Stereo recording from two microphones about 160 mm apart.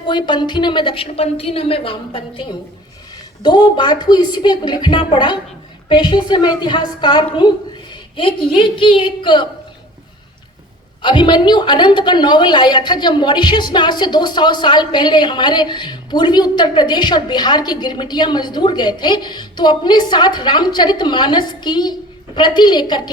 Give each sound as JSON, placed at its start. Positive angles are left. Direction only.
{"t": 0.1, "sound": "a woman's voice", "side_deg": 30}
{"t": 11.0, "sound": "a woman's voice", "side_deg": 30}